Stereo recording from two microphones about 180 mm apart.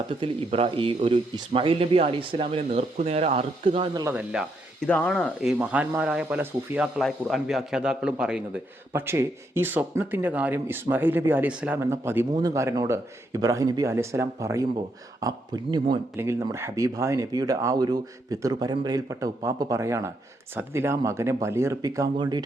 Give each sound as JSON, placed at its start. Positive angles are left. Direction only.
{"t": 0.2, "sound": "speech", "side_deg": -30}
{"t": 4.0, "sound": "speech", "side_deg": -5}
{"t": 4.9, "sound": "speech", "side_deg": 5}